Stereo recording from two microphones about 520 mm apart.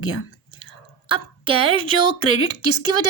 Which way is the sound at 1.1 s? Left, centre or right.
Left.